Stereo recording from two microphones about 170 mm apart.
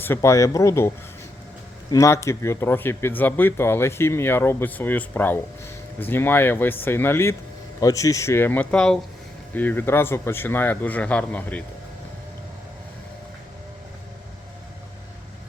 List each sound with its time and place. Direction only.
0.0 s speech: 15° left (ahead or behind)
1.9 s speech: 15° left (ahead or behind)